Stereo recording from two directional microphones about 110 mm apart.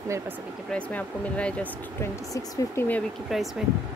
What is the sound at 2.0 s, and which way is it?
Speech, 25° left (ahead or behind).